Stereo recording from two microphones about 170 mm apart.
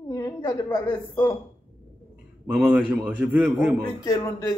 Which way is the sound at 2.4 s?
10° right (ahead or behind).